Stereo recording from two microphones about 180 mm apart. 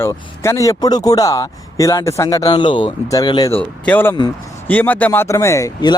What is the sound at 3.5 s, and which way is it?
Speech, 10° left (ahead or behind).